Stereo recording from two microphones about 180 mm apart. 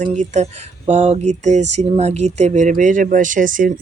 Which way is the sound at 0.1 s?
40° right (ahead or behind).